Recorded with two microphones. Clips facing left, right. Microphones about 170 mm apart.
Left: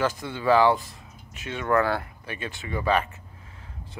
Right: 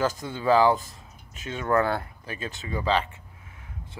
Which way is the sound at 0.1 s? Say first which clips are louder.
Even; 45° right (ahead or behind).